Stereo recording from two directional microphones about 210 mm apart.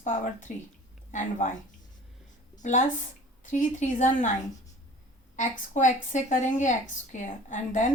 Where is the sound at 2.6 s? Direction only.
35° left (ahead or behind).